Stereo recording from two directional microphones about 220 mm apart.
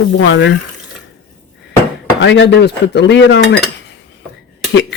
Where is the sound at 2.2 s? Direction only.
55° left (ahead or behind).